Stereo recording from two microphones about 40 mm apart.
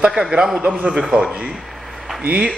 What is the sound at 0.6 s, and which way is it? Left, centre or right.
Speech, right.